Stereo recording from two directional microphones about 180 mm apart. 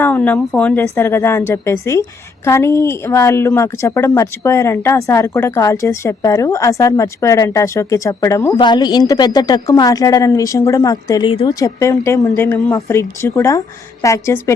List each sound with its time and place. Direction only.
0.0 s speech: 10° left (ahead or behind); by 11.5 s 30° left (ahead or behind)
11.6 s speech: 15° left (ahead or behind)